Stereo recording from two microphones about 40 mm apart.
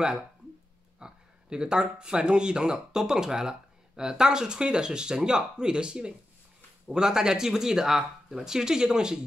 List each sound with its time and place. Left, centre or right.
0.9 s speech: right